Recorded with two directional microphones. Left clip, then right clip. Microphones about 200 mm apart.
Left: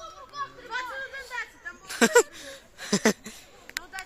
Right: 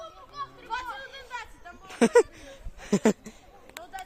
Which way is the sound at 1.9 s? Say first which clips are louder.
Even; 20° right (ahead or behind).